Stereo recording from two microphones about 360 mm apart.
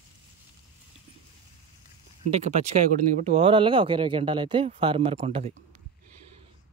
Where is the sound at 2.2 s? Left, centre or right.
Centre.